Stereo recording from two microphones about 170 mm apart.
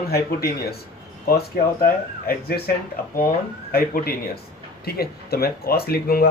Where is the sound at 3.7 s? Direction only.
60° left (ahead or behind).